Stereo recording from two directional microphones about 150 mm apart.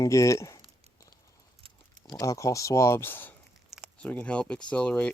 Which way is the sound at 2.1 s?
20° left (ahead or behind).